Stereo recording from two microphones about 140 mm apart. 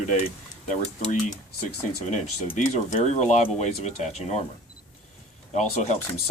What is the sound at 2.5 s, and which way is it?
Speech, 60° left (ahead or behind).